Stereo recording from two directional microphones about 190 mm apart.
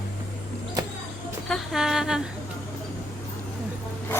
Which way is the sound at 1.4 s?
Centre (ahead or behind).